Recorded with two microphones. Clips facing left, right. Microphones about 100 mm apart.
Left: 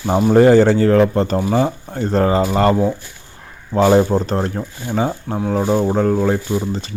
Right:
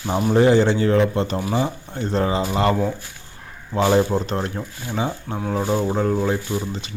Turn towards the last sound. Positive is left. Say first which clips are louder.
# left 5 dB
turn(degrees=35)  # may be behind; listen again after turning